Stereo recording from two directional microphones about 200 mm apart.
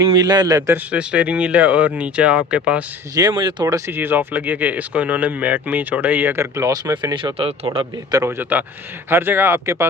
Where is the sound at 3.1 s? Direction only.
20° right (ahead or behind).